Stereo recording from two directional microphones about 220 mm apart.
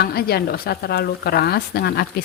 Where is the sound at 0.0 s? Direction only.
45° left (ahead or behind).